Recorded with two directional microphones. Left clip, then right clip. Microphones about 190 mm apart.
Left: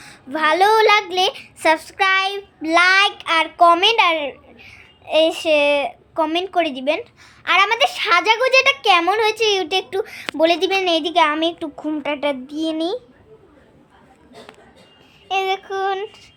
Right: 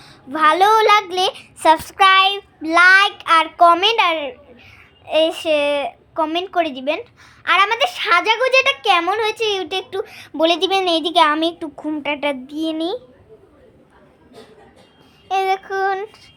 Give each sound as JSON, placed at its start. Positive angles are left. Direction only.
{"t": 0.0, "sound": "a sound", "side_deg": 20}
{"t": 0.3, "sound": "child singing", "side_deg": 5}
{"t": 11.4, "sound": "a woman's voice", "side_deg": 15}
{"t": 12.2, "sound": "child singing", "side_deg": 5}
{"t": 15.3, "sound": "child singing", "side_deg": -5}